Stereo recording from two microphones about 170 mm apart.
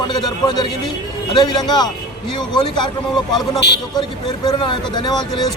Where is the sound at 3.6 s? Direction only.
90° left.